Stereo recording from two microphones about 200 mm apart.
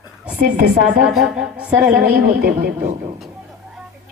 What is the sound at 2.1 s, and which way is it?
Speech, 50° right (ahead or behind).